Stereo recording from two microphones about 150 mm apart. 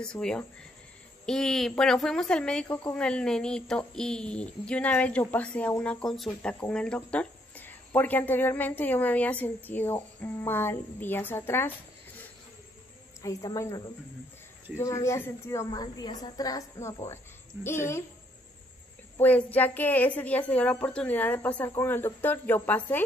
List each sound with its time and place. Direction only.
0.0 s a woman's voice: 5° left (ahead or behind)
13.2 s a woman's voice: 25° left (ahead or behind)
19.1 s a woman's voice: 10° left (ahead or behind)